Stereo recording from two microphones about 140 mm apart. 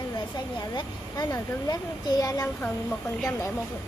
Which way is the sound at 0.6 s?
30° left (ahead or behind).